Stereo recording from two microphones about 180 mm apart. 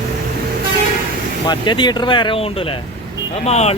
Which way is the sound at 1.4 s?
25° left (ahead or behind).